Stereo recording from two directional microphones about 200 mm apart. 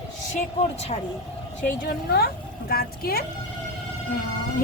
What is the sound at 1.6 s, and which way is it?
Speech, 50° left (ahead or behind).